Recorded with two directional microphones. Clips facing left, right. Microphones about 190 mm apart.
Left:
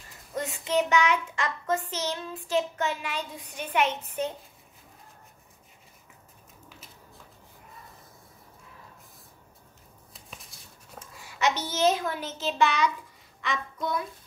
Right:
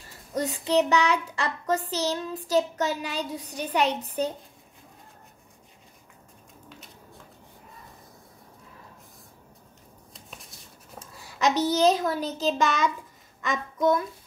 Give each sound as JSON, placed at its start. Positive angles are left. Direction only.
{"t": 0.3, "sound": "child singing", "side_deg": -35}
{"t": 10.1, "sound": "a sound", "side_deg": 0}
{"t": 11.2, "sound": "child singing", "side_deg": -40}
{"t": 13.4, "sound": "a child's voice", "side_deg": -45}